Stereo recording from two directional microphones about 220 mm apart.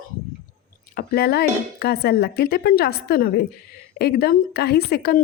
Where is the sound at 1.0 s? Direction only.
45° left (ahead or behind).